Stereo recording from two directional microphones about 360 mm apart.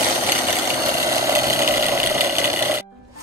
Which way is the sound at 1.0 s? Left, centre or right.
Centre.